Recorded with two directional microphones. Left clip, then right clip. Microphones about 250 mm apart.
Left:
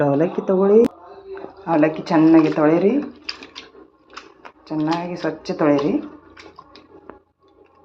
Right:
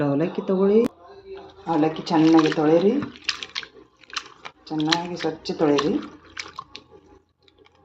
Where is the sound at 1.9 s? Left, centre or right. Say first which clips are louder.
Left 2 dB; left.